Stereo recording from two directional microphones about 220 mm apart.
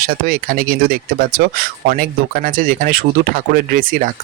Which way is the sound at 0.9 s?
45° right (ahead or behind).